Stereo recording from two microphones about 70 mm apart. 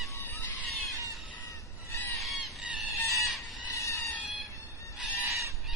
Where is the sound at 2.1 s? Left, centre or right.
Centre.